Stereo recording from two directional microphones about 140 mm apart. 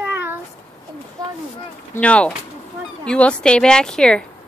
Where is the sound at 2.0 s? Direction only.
10° left (ahead or behind).